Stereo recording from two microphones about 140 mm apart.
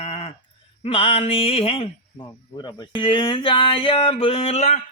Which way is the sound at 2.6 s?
30° left (ahead or behind).